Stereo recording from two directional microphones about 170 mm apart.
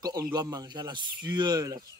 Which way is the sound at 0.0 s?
25° right (ahead or behind).